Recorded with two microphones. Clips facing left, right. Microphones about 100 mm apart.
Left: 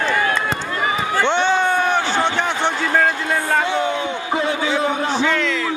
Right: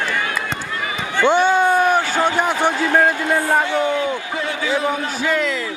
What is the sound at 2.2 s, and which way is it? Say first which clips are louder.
Speech: right 2 dB; 10° right (ahead or behind).